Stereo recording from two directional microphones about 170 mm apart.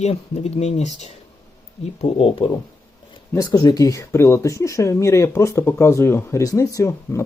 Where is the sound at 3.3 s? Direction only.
20° left (ahead or behind).